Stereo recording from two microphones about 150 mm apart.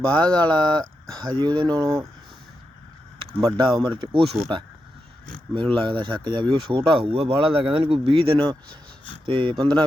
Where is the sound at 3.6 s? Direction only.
30° right (ahead or behind).